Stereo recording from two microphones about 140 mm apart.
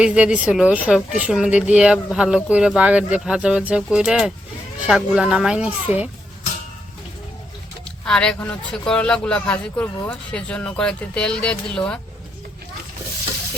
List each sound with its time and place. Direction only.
0.0 s a woman's voice: 5° right (ahead or behind)
7.9 s speech: 5° left (ahead or behind)